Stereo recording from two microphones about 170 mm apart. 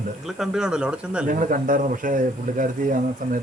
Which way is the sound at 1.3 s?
50° right (ahead or behind).